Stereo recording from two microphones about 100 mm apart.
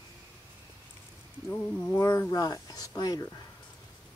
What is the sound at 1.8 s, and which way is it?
Speech, 30° left (ahead or behind).